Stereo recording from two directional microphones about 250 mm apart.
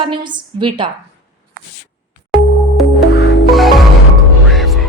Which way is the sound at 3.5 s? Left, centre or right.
Centre.